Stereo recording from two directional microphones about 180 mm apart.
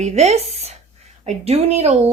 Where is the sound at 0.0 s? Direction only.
35° right (ahead or behind).